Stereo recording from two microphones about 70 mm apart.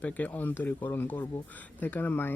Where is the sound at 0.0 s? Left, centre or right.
Left.